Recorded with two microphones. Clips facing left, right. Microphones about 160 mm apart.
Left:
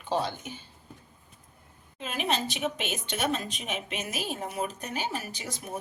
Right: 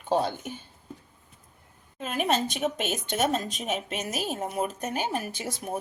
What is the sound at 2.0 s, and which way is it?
A woman's voice, 45° right (ahead or behind).